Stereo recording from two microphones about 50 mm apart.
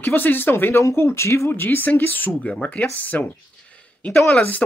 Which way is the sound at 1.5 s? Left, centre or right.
Left.